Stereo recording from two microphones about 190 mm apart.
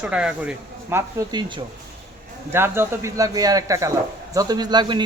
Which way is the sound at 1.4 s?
25° right (ahead or behind).